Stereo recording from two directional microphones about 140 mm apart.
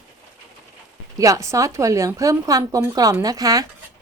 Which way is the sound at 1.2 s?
25° right (ahead or behind).